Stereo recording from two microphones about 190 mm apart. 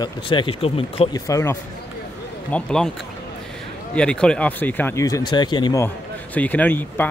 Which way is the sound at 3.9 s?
5° left (ahead or behind).